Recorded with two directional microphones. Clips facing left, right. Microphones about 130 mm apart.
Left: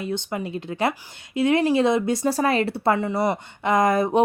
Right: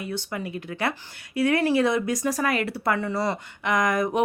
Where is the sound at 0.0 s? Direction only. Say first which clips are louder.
Left 4 dB; 25° left (ahead or behind).